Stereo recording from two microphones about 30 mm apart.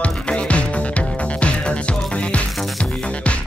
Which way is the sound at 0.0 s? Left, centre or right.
Left.